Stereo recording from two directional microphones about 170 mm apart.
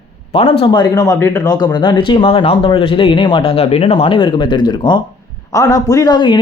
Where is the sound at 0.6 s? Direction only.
25° left (ahead or behind).